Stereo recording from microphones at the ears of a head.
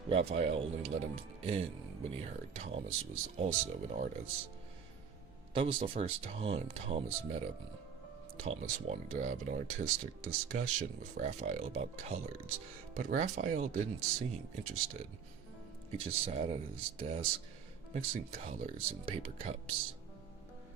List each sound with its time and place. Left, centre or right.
0.1 s speech: right
5.7 s speech: right
8.4 s speech: right